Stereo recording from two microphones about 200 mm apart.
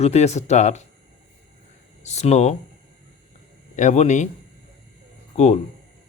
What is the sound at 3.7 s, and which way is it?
Speech, 35° left (ahead or behind).